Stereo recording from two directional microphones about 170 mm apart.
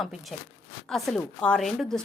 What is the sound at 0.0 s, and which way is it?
A woman's voice, centre (ahead or behind).